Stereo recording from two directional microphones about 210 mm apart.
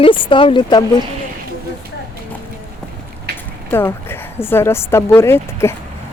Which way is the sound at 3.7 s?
10° left (ahead or behind).